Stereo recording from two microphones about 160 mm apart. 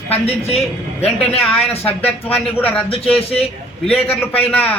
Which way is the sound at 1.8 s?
10° left (ahead or behind).